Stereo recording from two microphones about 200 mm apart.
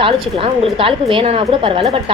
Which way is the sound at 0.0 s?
25° right (ahead or behind).